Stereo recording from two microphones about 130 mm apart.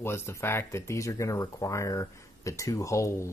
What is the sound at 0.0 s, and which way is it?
Speech, 20° left (ahead or behind).